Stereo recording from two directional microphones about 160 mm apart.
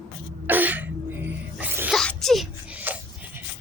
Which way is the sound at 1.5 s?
10° right (ahead or behind).